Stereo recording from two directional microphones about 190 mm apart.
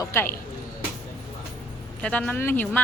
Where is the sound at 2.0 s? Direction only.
5° left (ahead or behind).